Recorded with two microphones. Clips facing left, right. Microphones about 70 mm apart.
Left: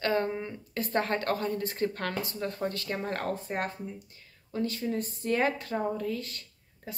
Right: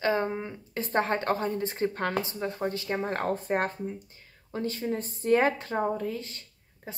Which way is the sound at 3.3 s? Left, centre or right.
Right.